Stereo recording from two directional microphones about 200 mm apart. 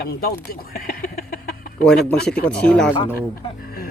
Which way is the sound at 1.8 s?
5° left (ahead or behind).